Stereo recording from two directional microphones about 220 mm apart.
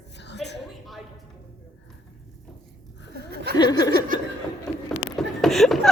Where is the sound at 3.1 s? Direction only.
45° right (ahead or behind).